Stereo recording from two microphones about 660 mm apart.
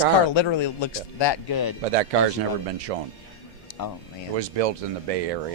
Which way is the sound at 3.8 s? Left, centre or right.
Left.